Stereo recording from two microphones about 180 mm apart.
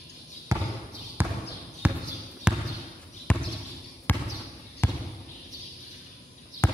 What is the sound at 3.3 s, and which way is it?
Basketball bounce, 5° left (ahead or behind).